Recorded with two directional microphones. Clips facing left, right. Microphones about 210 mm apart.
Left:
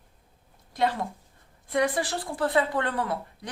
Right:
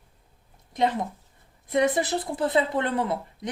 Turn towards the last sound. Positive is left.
turn(degrees=-25)  # may be behind; listen again after turning